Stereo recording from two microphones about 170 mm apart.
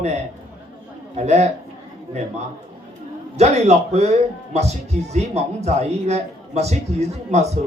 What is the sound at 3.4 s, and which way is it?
Speech, 40° right (ahead or behind).